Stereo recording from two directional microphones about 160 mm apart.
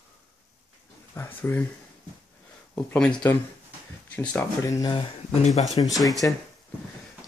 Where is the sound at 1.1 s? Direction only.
15° left (ahead or behind).